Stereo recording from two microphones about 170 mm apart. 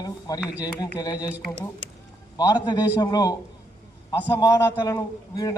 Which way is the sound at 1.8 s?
40° right (ahead or behind).